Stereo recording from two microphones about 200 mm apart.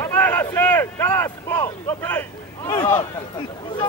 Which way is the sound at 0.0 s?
10° left (ahead or behind).